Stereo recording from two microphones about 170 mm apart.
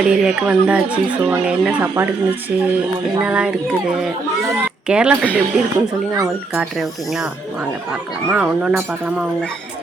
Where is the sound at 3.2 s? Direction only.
5° right (ahead or behind).